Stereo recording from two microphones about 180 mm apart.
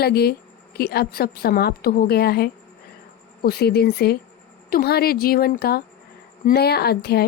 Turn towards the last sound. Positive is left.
turn(degrees=60)  # may be behind; listen again after turning